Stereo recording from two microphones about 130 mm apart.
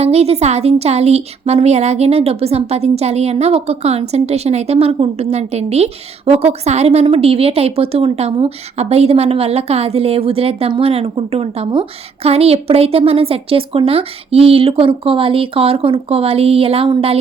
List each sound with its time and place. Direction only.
0.0 s a woman's voice: 55° right (ahead or behind)